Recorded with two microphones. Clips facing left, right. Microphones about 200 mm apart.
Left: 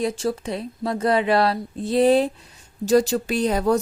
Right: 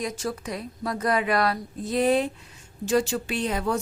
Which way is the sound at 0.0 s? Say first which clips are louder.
Left 6 dB; 30° left (ahead or behind).